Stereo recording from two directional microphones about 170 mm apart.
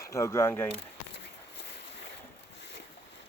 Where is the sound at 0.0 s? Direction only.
20° left (ahead or behind).